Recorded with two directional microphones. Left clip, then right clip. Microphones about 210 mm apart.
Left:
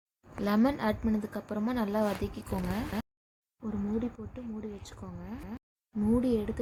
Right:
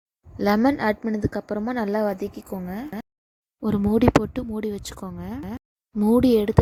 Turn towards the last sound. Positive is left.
turn(degrees=-45)  # may be behind; listen again after turning